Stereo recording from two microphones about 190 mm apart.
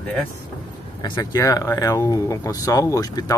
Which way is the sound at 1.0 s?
20° left (ahead or behind).